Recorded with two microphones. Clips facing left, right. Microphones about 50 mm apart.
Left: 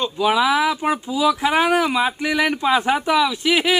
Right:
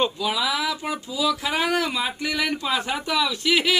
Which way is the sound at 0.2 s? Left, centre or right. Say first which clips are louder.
Left 8 dB; left.